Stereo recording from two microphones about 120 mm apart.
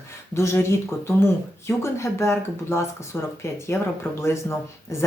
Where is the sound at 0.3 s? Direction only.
20° left (ahead or behind).